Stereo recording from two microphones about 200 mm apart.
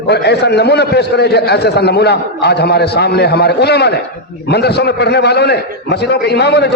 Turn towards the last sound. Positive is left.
turn(degrees=55)  # may be behind; listen again after turning